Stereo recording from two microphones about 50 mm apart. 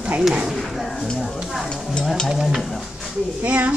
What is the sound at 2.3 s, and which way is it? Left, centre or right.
Stir, centre.